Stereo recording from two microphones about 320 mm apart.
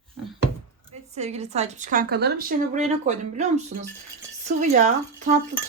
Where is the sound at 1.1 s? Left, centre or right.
Centre.